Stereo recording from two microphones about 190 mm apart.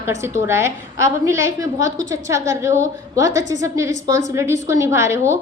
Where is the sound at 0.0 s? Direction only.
15° right (ahead or behind).